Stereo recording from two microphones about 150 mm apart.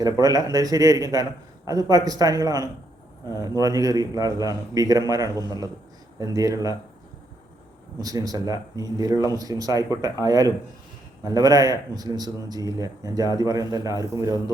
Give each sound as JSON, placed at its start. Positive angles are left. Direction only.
{"t": 0.0, "sound": "a man's voice", "side_deg": -25}
{"t": 8.0, "sound": "a man's voice", "side_deg": -25}